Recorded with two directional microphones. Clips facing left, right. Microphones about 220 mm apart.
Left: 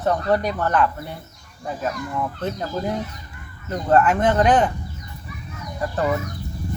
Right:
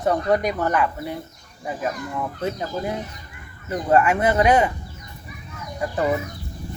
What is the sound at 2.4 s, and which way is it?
Speech, 10° right (ahead or behind).